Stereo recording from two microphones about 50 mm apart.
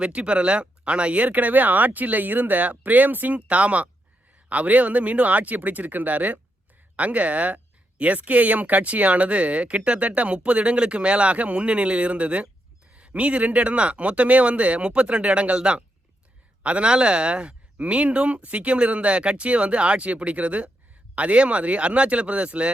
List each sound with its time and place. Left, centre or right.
0.0 s speech: right